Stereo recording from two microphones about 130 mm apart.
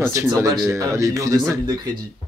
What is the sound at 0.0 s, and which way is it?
Speech, 20° right (ahead or behind).